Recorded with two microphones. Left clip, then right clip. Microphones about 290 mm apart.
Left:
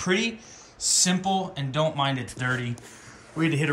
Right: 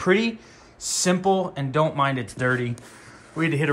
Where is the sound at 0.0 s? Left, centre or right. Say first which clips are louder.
Right 4 dB; centre.